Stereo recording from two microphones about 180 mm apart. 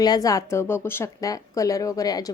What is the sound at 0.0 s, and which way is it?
A woman's voice, 20° left (ahead or behind).